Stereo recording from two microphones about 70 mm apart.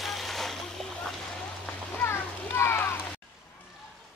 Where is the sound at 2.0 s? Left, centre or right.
Left.